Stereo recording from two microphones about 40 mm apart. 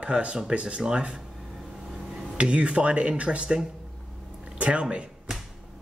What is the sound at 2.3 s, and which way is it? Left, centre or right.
Speech, right.